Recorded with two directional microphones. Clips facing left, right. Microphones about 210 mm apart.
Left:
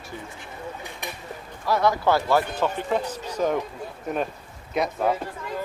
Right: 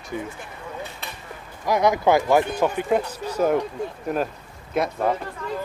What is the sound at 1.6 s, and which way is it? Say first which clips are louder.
Speech: right 2 dB; 15° right (ahead or behind).